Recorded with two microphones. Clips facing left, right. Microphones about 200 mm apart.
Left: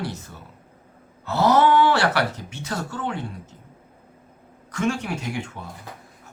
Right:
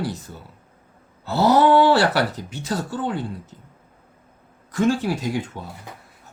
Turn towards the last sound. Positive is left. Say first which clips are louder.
# right 5 dB
turn(degrees=-35)  # may be behind; listen again after turning